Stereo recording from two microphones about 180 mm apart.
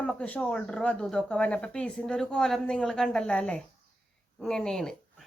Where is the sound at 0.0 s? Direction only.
5° left (ahead or behind).